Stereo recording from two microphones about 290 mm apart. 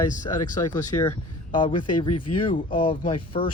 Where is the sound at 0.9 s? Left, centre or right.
Centre.